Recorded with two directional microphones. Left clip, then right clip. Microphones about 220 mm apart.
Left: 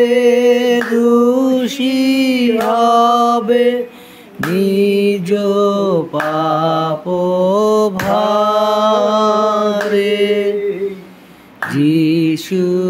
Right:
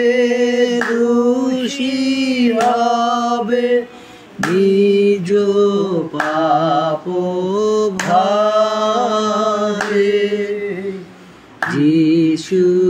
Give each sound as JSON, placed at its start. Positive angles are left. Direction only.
{"t": 0.0, "sound": "singing", "side_deg": 35}
{"t": 2.7, "sound": "mantra", "side_deg": 35}
{"t": 8.2, "sound": "chant", "side_deg": 35}
{"t": 11.7, "sound": "mantra", "side_deg": 30}